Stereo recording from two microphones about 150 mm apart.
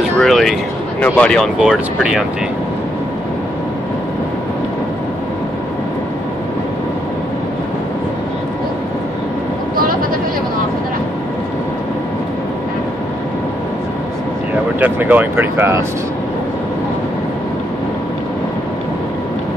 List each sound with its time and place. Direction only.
0.2 s speech: centre (ahead or behind)
1.6 s speech: 5° right (ahead or behind)
14.8 s speech: 10° right (ahead or behind)